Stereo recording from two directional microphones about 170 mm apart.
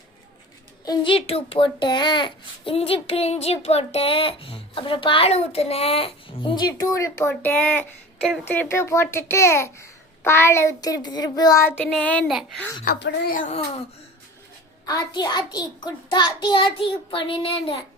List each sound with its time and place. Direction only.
0.9 s a child's voice: 30° left (ahead or behind); by 12.6 s 5° left (ahead or behind)
12.8 s speech: 65° left (ahead or behind); by 13.7 s 45° left (ahead or behind)
14.8 s a child's voice: 25° left (ahead or behind)